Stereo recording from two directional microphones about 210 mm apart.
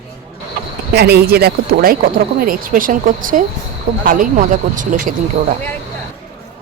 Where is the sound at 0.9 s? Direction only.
50° right (ahead or behind).